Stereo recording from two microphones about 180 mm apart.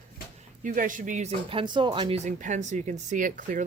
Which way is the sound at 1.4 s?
30° right (ahead or behind).